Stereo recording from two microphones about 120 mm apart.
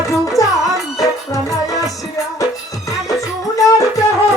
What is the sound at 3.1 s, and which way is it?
Music, 30° left (ahead or behind).